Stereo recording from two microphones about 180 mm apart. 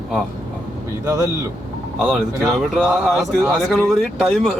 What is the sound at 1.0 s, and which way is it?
Speech, 15° right (ahead or behind).